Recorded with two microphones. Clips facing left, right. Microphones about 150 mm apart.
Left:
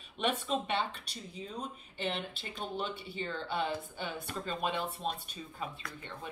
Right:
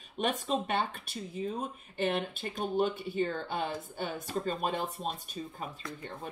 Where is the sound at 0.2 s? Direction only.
45° right (ahead or behind).